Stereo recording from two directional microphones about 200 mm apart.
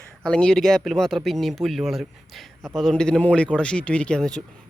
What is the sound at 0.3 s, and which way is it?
Speech, 5° left (ahead or behind).